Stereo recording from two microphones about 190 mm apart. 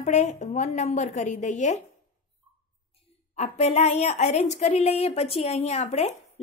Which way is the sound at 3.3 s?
35° left (ahead or behind).